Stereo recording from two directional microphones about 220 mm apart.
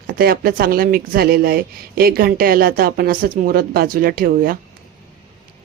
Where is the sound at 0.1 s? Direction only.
45° right (ahead or behind).